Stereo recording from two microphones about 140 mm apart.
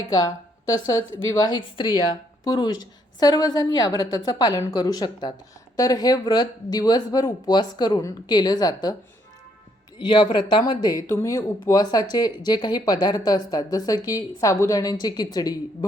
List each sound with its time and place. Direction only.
0.1 s a woman's voice: 25° left (ahead or behind)
10.0 s a woman's voice: 35° left (ahead or behind)